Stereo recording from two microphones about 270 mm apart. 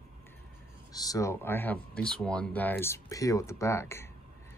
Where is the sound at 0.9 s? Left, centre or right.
Centre.